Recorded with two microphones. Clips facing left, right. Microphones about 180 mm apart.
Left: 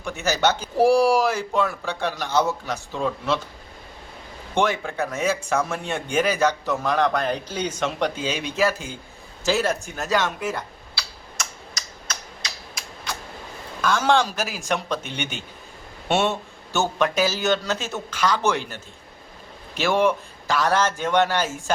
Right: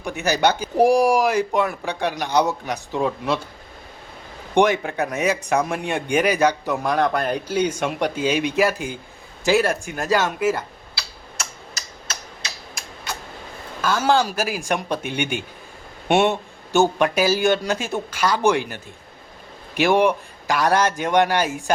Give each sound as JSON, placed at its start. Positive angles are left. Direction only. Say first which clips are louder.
{"t": 0.2, "sound": "speech", "louder": "right 2 dB", "side_deg": -15}
{"t": 4.5, "sound": "speech", "louder": "right 5 dB", "side_deg": -15}
{"t": 13.8, "sound": "speech", "louder": "right 1 dB", "side_deg": -5}